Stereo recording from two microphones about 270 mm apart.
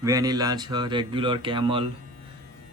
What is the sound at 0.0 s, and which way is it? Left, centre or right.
Speech, centre.